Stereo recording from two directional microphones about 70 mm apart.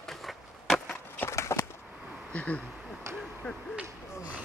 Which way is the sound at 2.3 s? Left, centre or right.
Centre.